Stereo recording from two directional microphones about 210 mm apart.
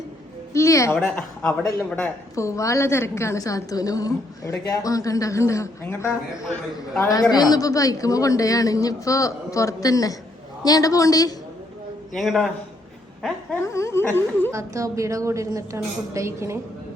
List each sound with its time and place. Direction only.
0.5 s a woman's voice: 15° left (ahead or behind)
12.1 s a man's voice: centre (ahead or behind)
13.2 s laughter: 10° left (ahead or behind)
14.5 s a woman's voice: 15° right (ahead or behind)